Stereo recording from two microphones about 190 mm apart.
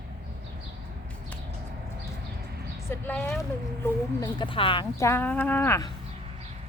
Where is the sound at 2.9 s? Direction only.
10° left (ahead or behind).